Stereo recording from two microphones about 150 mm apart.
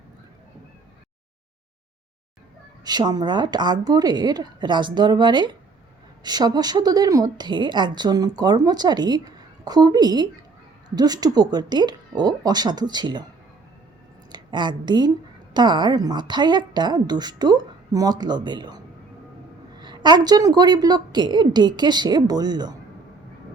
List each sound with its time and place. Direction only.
2.8 s a woman's voice: 25° right (ahead or behind)
14.3 s a woman's voice: 30° right (ahead or behind)
19.8 s a woman's voice: 30° right (ahead or behind)